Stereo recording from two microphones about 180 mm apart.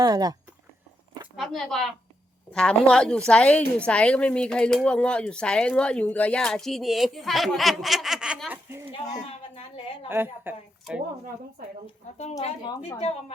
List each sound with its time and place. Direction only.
0.0 s speech: 20° right (ahead or behind)
1.4 s a woman's voice: centre (ahead or behind)
9.6 s a sound: 30° left (ahead or behind)
10.1 s a woman's voice: 10° right (ahead or behind)
12.6 s a woman's voice: 20° left (ahead or behind)